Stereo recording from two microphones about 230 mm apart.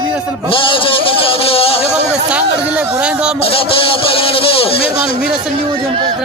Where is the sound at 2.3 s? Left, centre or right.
Centre.